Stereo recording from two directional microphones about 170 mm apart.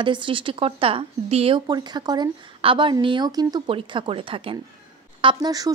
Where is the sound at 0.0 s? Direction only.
30° right (ahead or behind).